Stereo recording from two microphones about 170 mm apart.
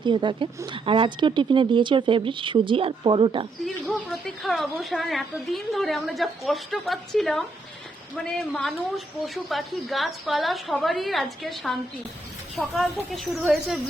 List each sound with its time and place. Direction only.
0.0 s speech: 25° right (ahead or behind)
3.8 s speech: 5° left (ahead or behind)